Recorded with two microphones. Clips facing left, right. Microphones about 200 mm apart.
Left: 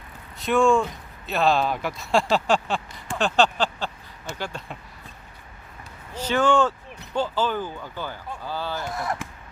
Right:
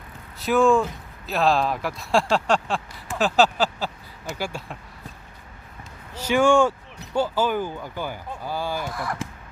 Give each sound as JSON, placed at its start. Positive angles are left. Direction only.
{"t": 0.3, "sound": "speech", "side_deg": 0}
{"t": 6.1, "sound": "speech", "side_deg": -10}
{"t": 8.9, "sound": "speech", "side_deg": 25}